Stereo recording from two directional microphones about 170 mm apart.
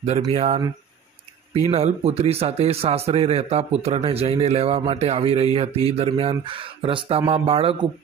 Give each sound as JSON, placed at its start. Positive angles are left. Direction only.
{"t": 0.3, "sound": "a man's voice", "side_deg": -40}